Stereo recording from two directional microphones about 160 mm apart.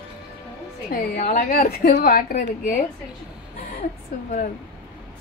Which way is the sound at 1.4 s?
65° left (ahead or behind).